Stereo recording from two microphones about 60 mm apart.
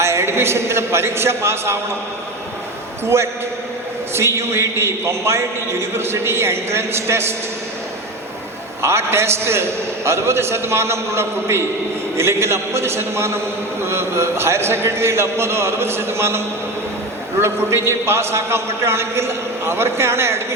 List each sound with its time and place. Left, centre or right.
0.0 s a man's voice: right
3.0 s a man's voice: right
8.8 s a man's voice: right
17.4 s a man's voice: right